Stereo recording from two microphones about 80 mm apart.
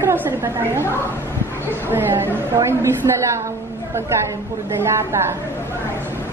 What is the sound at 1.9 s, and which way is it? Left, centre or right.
A woman's voice, right.